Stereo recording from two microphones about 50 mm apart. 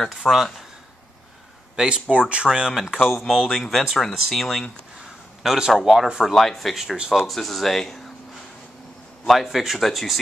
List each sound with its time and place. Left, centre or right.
0.1 s speech: centre
1.8 s speech: centre
5.7 s speech: centre
6.3 s speech: centre
9.3 s speech: centre